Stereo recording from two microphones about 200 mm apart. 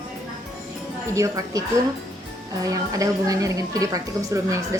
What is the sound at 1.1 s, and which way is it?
Speech, 15° right (ahead or behind).